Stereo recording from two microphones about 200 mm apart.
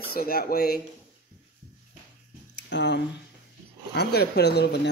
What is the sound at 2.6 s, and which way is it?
Speech, 60° left (ahead or behind).